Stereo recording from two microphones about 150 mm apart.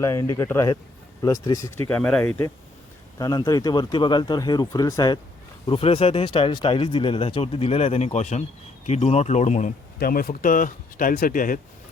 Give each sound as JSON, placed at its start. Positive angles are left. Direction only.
{"t": 0.0, "sound": "speech", "side_deg": 20}
{"t": 1.9, "sound": "speech", "side_deg": 5}
{"t": 3.2, "sound": "speech", "side_deg": 25}
{"t": 5.6, "sound": "speech", "side_deg": 35}
{"t": 10.0, "sound": "speech", "side_deg": 75}